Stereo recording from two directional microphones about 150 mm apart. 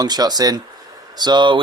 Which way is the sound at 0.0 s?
25° right (ahead or behind).